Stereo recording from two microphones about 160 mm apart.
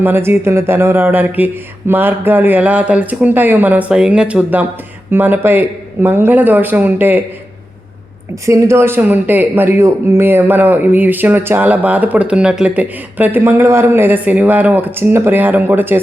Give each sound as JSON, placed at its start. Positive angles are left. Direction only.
{"t": 0.0, "sound": "speech", "side_deg": -15}
{"t": 8.4, "sound": "speech", "side_deg": -20}